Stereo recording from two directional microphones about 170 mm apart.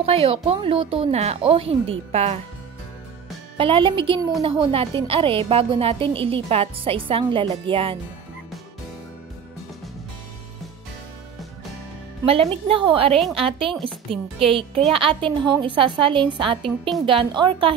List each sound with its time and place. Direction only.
0.0 s a woman's voice: 35° right (ahead or behind)
3.5 s a woman's voice: 30° right (ahead or behind)
12.3 s a woman's voice: 35° right (ahead or behind)
13.7 s a woman's voice: centre (ahead or behind)
14.4 s a woman's voice: 30° right (ahead or behind)